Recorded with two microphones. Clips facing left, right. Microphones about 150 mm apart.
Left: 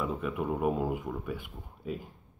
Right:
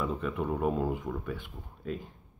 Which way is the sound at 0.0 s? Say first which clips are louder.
Even; 5° left (ahead or behind).